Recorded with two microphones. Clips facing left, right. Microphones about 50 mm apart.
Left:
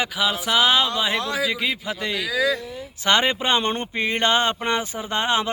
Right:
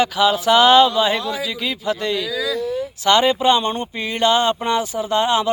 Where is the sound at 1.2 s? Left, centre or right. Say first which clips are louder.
Right 1 dB; left.